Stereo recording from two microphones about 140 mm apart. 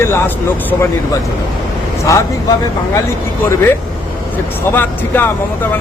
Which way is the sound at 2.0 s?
20° left (ahead or behind).